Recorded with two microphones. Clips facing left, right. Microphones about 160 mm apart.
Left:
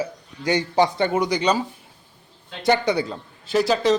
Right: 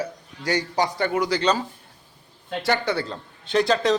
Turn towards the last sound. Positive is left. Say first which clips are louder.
# left 1 dB
turn(degrees=0)  # may be behind; listen again after turning